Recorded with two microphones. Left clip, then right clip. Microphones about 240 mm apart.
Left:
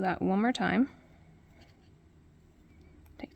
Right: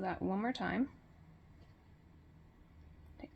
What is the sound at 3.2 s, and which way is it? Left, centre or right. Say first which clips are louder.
Whispering: left 8 dB; left.